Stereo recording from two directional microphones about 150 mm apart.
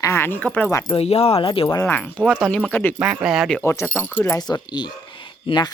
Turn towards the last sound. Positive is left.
turn(degrees=30)  # may be behind; listen again after turning